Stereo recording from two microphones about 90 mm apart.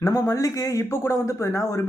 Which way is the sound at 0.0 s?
40° left (ahead or behind).